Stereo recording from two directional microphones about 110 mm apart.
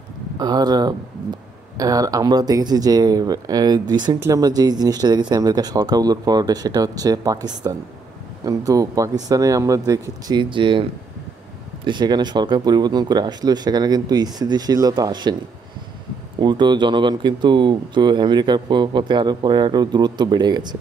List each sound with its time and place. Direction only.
0.4 s speech: 40° right (ahead or behind)
16.3 s speech: 45° right (ahead or behind)